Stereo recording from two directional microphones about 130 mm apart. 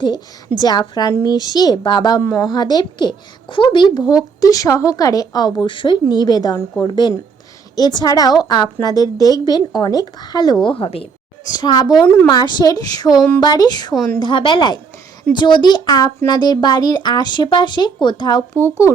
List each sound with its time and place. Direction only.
0.6 s a woman's voice: 30° left (ahead or behind)
5.5 s a woman's voice: 40° left (ahead or behind)
11.4 s a woman's voice: 30° left (ahead or behind)
12.0 s a woman's voice: 15° left (ahead or behind)
12.3 s a woman's voice: 30° left (ahead or behind)
18.5 s a woman's voice: 20° left (ahead or behind)